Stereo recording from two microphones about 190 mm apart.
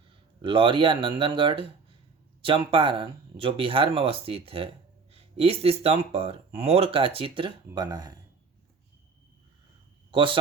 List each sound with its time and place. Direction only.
0.4 s speech: 25° right (ahead or behind)
10.1 s speech: 25° right (ahead or behind)